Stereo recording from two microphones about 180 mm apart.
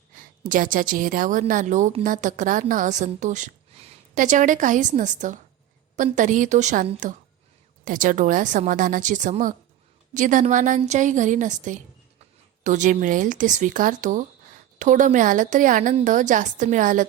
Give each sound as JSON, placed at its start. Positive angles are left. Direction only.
{"t": 0.4, "sound": "a woman's voice", "side_deg": -50}